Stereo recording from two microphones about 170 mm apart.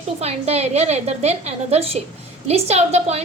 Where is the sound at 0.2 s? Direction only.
40° right (ahead or behind).